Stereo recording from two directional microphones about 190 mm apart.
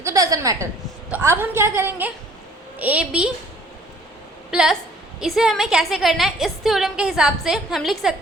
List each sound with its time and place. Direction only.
0.0 s a woman's voice: 15° right (ahead or behind)
4.5 s a woman's voice: centre (ahead or behind)